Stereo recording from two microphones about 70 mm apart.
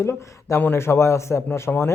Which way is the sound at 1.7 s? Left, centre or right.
Left.